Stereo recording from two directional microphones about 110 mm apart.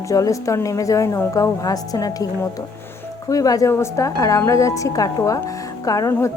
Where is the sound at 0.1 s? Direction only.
30° left (ahead or behind).